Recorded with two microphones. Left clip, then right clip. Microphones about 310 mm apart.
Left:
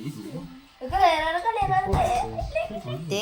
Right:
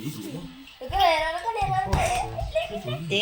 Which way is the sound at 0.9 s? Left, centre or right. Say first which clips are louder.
Left 1 dB; right.